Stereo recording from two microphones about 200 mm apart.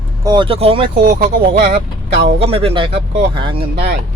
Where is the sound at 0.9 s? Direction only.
50° right (ahead or behind).